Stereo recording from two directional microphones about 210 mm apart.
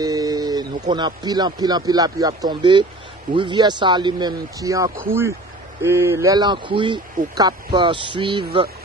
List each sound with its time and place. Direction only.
0.0 s speech: 15° right (ahead or behind)